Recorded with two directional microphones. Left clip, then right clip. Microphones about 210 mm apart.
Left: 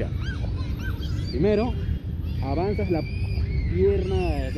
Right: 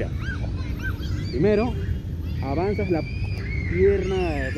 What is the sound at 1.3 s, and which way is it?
Speech, 5° right (ahead or behind).